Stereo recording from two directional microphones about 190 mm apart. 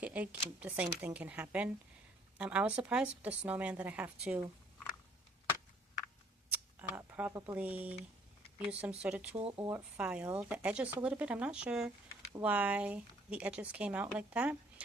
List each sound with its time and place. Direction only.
0.0 s a woman's voice: 5° right (ahead or behind)
6.5 s a woman's voice: 10° right (ahead or behind)
9.4 s speech: 30° right (ahead or behind)
9.6 s a woman's voice: 10° right (ahead or behind)